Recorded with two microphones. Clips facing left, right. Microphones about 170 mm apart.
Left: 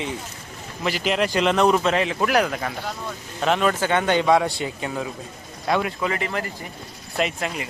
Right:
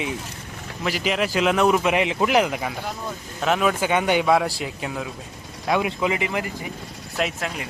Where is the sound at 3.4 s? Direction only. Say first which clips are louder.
Even; 5° right (ahead or behind).